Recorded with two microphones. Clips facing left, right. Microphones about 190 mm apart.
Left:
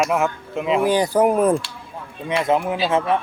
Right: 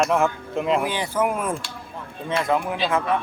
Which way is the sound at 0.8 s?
40° left (ahead or behind).